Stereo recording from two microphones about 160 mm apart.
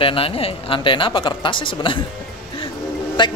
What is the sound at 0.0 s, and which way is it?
Speech, 35° left (ahead or behind).